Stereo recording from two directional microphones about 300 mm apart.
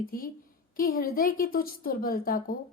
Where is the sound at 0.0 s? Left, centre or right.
Left.